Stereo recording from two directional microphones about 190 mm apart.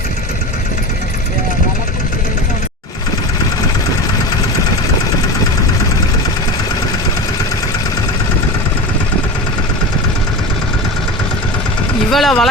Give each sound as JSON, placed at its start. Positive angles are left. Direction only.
{"t": 12.1, "sound": "vehicle", "side_deg": 0}